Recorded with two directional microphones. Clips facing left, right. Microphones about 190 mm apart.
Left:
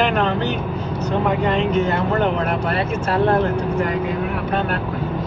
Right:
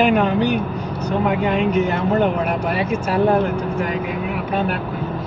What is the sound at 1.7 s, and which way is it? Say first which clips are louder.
Speech: right 1 dB; 15° right (ahead or behind).